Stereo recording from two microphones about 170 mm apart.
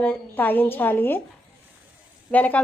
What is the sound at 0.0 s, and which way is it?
A woman's voice, 10° left (ahead or behind).